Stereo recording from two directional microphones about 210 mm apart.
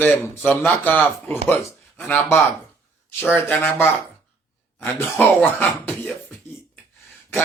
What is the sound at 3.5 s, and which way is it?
Speech, 10° left (ahead or behind).